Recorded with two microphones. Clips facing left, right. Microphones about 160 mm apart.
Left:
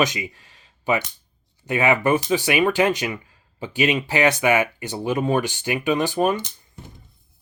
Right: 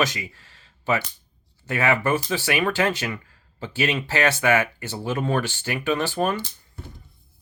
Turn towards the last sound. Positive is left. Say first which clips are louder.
# left 3 dB
turn(degrees=15)  # may be behind; listen again after turning